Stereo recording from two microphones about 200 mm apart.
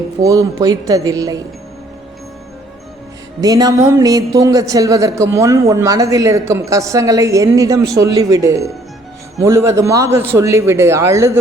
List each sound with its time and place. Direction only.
0.2 s a woman's voice: 15° right (ahead or behind)
3.4 s a woman's voice: 20° right (ahead or behind)